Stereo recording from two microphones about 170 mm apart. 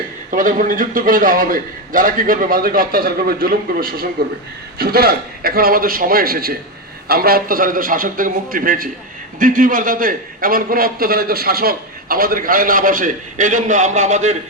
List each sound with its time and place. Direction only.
0.3 s a man's voice: 50° right (ahead or behind)